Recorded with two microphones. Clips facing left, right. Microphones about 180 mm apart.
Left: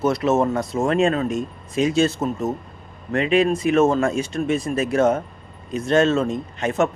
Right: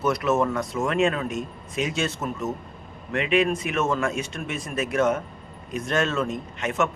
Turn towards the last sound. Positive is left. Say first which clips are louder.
# left 4 dB
turn(degrees=35)  # may be behind; listen again after turning